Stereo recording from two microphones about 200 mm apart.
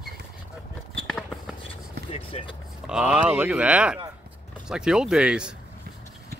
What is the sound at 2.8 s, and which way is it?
Speech, 5° right (ahead or behind).